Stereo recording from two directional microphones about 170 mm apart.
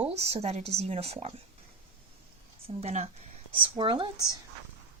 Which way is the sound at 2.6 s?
40° right (ahead or behind).